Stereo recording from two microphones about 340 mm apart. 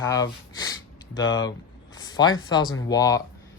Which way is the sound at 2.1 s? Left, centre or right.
Centre.